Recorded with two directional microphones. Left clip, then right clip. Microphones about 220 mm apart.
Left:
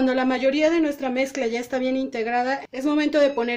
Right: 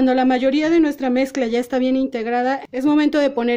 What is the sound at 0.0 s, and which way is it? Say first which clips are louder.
A woman's voice: right 4 dB; 35° right (ahead or behind).